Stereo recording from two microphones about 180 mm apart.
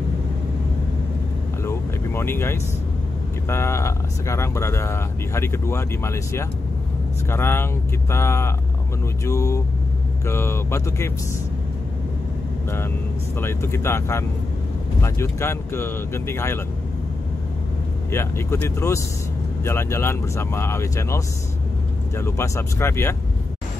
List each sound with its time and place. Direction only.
1.6 s vehicle: 15° left (ahead or behind)
3.4 s speech: 15° left (ahead or behind)
13.4 s speech: 15° left (ahead or behind)
18.1 s speech: 15° left (ahead or behind)